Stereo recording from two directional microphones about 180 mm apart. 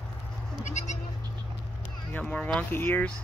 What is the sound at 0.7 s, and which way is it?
Goat, 40° left (ahead or behind).